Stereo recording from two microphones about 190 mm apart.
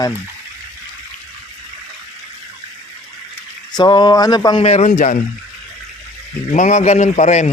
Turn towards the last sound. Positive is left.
turn(degrees=40)  # may be behind; listen again after turning